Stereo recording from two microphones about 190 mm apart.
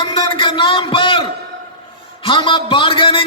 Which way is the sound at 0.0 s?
25° left (ahead or behind).